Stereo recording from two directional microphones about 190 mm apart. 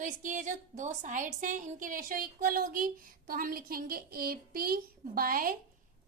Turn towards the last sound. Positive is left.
turn(degrees=-50)  # may be behind; listen again after turning